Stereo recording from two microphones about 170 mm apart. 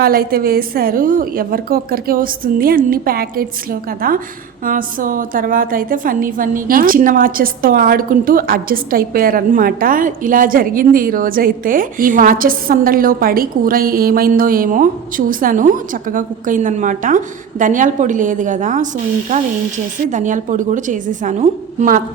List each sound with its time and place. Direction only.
0.0 s a woman's voice: 60° right (ahead or behind)
20.1 s a woman's voice: 50° right (ahead or behind)